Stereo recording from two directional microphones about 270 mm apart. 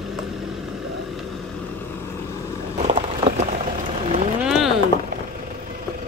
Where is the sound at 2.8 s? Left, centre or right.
Right.